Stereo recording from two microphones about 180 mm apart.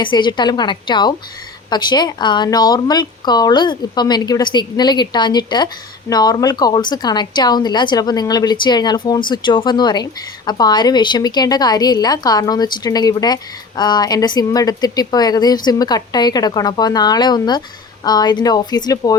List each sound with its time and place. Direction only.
0.0 s a woman's voice: 25° left (ahead or behind)